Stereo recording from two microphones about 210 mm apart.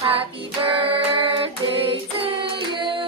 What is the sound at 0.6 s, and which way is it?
Child singing, 25° right (ahead or behind).